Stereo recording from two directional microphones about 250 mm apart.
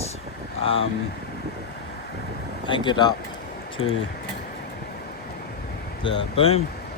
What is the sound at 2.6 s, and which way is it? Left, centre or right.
Speech, centre.